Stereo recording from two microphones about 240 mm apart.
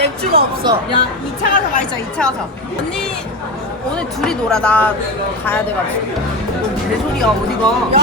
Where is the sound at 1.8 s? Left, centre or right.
Centre.